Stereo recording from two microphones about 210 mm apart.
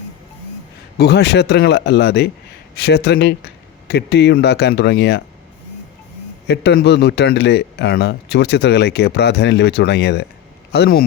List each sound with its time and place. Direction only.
0.9 s speech: 50° left (ahead or behind)
6.5 s a man's voice: 55° left (ahead or behind)